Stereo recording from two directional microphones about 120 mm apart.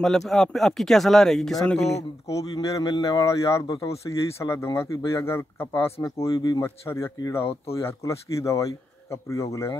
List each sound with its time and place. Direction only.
0.0 s speech: 5° left (ahead or behind)
2.2 s speech: 30° left (ahead or behind)